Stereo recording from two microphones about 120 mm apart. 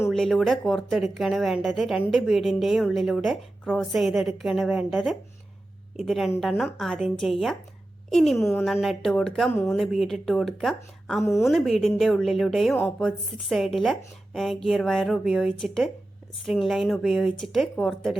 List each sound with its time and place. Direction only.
0.1 s a woman's voice: centre (ahead or behind)
11.2 s a woman's voice: 20° left (ahead or behind)
11.4 s a woman's voice: centre (ahead or behind)